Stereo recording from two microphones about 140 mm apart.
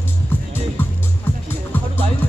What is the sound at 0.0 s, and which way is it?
Music, 15° left (ahead or behind).